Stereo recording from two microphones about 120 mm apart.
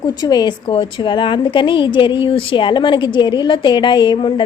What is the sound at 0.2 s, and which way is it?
A woman's voice, 35° left (ahead or behind).